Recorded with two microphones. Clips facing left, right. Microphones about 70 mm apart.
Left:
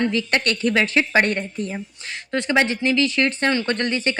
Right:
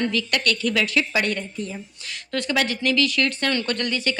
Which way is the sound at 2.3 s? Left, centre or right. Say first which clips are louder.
Left 4 dB; left.